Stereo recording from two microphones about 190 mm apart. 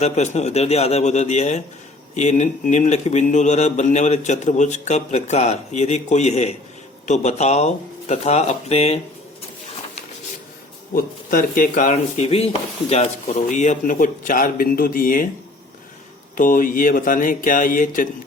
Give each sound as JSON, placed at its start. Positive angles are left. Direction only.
{"t": 0.0, "sound": "speech", "side_deg": 35}
{"t": 10.9, "sound": "a man's voice", "side_deg": 45}
{"t": 16.4, "sound": "a man's voice", "side_deg": 45}